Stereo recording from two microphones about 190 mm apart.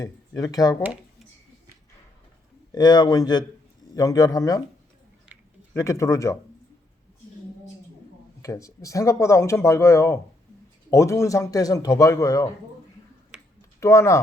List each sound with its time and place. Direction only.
0.0 s speech: 20° left (ahead or behind)
2.7 s speech: 20° left (ahead or behind)
5.7 s speech: 15° left (ahead or behind)
8.4 s speech: 15° left (ahead or behind)
13.7 s speech: 15° left (ahead or behind)